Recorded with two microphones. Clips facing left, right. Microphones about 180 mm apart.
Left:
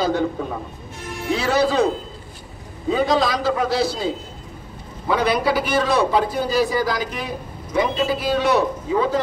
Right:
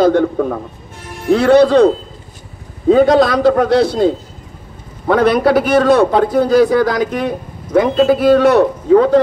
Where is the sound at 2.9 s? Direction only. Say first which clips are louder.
Right 10 dB; 60° right (ahead or behind).